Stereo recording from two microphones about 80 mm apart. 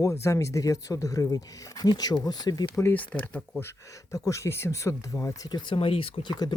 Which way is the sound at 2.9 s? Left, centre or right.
Centre.